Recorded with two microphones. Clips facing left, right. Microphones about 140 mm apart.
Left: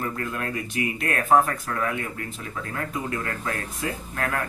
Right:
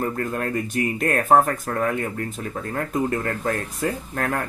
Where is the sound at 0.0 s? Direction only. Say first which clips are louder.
Right 4 dB; 40° right (ahead or behind).